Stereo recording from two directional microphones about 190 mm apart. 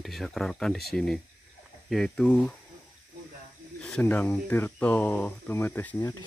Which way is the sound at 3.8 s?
5° left (ahead or behind).